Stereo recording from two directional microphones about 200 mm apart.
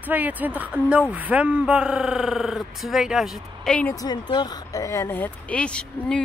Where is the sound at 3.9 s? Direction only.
20° left (ahead or behind).